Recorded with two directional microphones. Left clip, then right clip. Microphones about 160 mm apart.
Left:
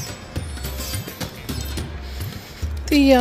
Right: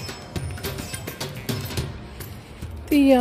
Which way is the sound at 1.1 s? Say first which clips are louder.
Even; centre (ahead or behind).